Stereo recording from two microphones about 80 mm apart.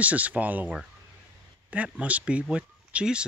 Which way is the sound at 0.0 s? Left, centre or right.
Centre.